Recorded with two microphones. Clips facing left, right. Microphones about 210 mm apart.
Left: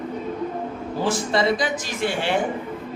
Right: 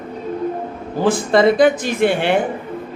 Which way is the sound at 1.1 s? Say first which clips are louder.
Right 8 dB; 55° right (ahead or behind).